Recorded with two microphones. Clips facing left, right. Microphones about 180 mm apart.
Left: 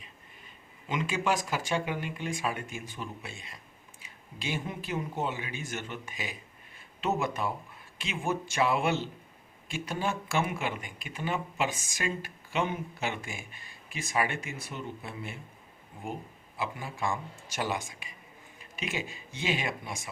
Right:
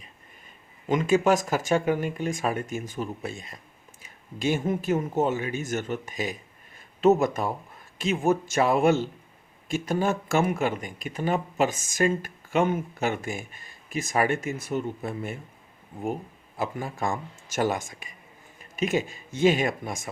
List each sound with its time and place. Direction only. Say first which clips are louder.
0.9 s speech: right 9 dB; 45° right (ahead or behind)
16.6 s speech: right 5 dB; 45° right (ahead or behind)